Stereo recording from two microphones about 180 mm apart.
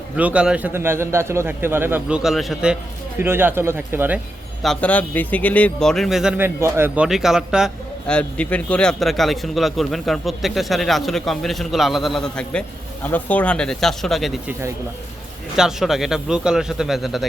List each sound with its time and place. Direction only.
0.2 s a man's voice: 5° right (ahead or behind)
4.6 s speech: 5° left (ahead or behind)
15.5 s speech: 5° right (ahead or behind)